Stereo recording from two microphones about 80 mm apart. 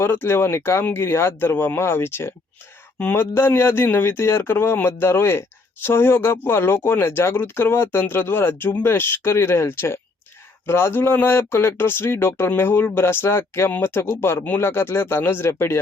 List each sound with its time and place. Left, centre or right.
0.0 s speech: left